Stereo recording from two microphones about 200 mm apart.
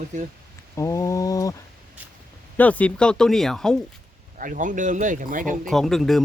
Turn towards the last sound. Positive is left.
turn(degrees=0)  # may be behind; listen again after turning